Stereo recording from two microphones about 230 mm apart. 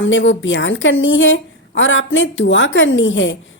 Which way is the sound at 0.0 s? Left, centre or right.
Left.